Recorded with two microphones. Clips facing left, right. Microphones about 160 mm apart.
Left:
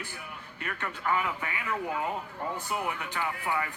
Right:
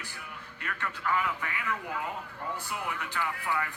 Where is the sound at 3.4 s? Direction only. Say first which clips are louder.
Left 1 dB; 20° left (ahead or behind).